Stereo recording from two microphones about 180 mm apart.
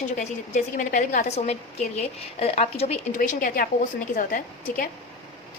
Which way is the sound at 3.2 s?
50° left (ahead or behind).